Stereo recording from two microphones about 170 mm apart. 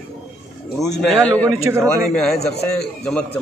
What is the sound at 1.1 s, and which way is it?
A man's voice, 5° left (ahead or behind).